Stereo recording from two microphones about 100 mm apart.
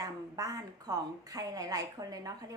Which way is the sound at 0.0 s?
35° right (ahead or behind).